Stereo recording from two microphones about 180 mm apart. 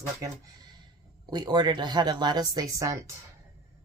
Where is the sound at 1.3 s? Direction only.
25° right (ahead or behind).